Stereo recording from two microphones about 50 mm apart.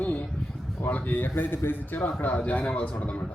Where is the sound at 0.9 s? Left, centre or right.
Left.